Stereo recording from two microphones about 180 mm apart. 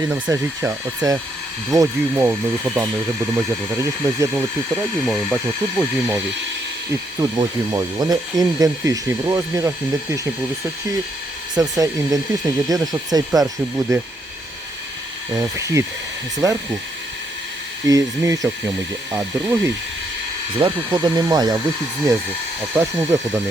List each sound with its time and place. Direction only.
0.0 s speech: 20° right (ahead or behind)
4.9 s speech: centre (ahead or behind); by 10.2 s 15° right (ahead or behind)
11.5 s speech: 20° right (ahead or behind)
15.4 s speech: 15° right (ahead or behind)
17.8 s speech: 20° right (ahead or behind)
20.6 s speech: 25° right (ahead or behind)
22.7 s speech: 15° right (ahead or behind)